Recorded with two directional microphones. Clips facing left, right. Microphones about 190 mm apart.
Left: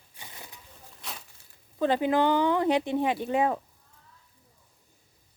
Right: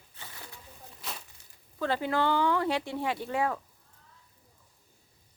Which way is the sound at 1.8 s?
20° left (ahead or behind).